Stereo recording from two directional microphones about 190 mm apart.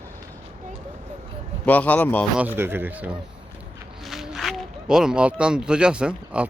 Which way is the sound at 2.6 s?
10° right (ahead or behind).